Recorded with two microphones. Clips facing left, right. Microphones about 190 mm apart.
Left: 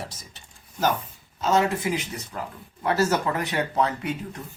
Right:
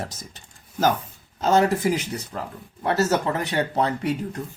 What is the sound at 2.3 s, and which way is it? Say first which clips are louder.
Speech: right 2 dB; 25° right (ahead or behind).